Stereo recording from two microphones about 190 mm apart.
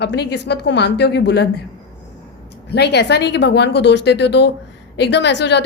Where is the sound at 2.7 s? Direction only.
60° left (ahead or behind).